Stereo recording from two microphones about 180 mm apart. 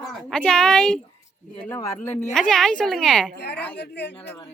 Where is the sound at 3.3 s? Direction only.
65° left (ahead or behind).